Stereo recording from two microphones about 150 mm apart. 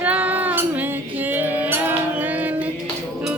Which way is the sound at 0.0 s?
10° right (ahead or behind).